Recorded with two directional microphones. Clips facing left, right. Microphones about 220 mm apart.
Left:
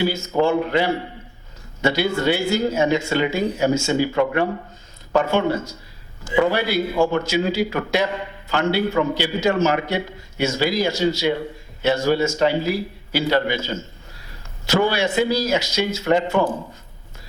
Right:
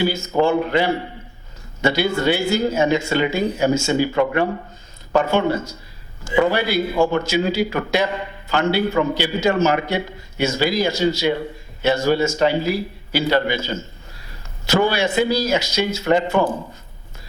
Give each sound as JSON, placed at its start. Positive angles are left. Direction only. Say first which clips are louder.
{"t": 0.2, "sound": "a man's voice", "louder": "right 1 dB", "side_deg": -30}
{"t": 0.7, "sound": "speech", "louder": "right 1 dB", "side_deg": -20}
{"t": 7.0, "sound": "speech", "louder": "right 1 dB", "side_deg": -25}
{"t": 7.3, "sound": "a man's voice", "louder": "right 1 dB", "side_deg": -10}
{"t": 14.8, "sound": "speech", "louder": "right 1 dB", "side_deg": -15}
{"t": 16.0, "sound": "speech", "louder": "right 1 dB", "side_deg": -20}